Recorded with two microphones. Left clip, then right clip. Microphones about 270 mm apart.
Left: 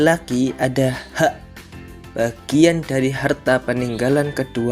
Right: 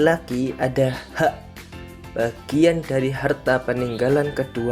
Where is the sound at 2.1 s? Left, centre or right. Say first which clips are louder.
Left 3 dB; right.